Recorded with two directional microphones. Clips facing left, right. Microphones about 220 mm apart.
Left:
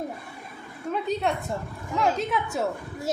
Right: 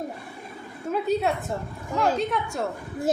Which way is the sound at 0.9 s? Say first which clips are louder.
Right 2 dB; centre (ahead or behind).